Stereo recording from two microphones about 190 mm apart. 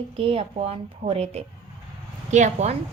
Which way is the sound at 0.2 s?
30° right (ahead or behind).